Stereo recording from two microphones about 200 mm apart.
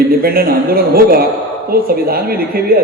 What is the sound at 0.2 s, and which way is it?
A woman's voice, 50° right (ahead or behind).